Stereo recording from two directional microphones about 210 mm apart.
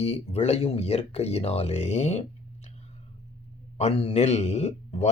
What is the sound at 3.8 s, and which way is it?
Speech, 30° left (ahead or behind).